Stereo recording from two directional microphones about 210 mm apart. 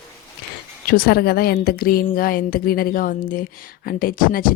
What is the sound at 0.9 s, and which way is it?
A woman's voice, 45° left (ahead or behind).